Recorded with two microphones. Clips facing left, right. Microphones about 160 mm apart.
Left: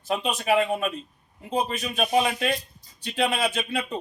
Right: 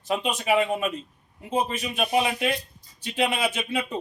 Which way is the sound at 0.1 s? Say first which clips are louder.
Even; centre (ahead or behind).